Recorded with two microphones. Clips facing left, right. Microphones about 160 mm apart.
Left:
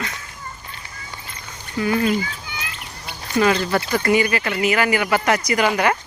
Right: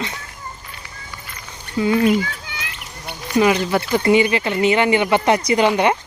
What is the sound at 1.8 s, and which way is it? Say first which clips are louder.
Speech: right 4 dB; 20° right (ahead or behind).